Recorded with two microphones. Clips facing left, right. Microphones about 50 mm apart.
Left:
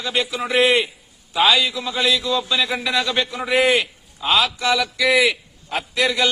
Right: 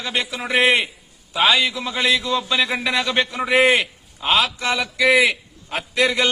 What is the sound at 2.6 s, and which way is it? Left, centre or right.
Speech, centre.